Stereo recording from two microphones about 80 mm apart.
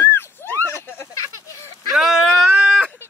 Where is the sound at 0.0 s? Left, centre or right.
Left.